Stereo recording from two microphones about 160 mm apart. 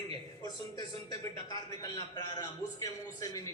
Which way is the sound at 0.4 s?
25° left (ahead or behind).